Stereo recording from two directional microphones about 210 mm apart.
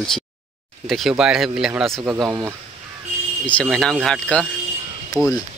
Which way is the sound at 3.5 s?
5° left (ahead or behind).